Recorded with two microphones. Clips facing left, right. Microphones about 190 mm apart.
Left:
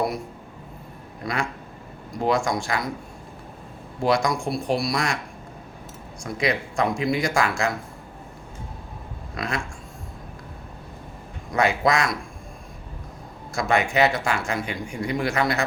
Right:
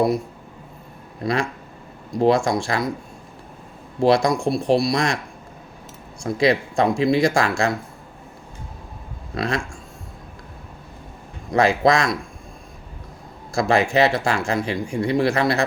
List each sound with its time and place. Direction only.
1.2 s speech: 30° right (ahead or behind)
4.0 s speech: 30° right (ahead or behind)
6.2 s speech: 30° right (ahead or behind)
9.3 s speech: 30° right (ahead or behind)
11.5 s speech: 35° right (ahead or behind)
13.5 s speech: 30° right (ahead or behind)